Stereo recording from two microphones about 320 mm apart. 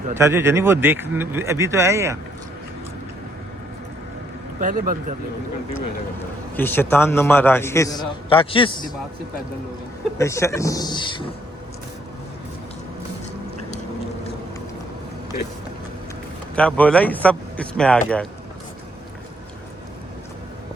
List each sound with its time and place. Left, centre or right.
0.2 s speech: centre
4.6 s speech: right
6.6 s a man's voice: centre
10.2 s a man's voice: centre
16.6 s speech: centre